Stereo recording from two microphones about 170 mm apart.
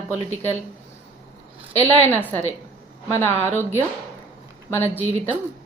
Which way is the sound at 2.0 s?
10° left (ahead or behind).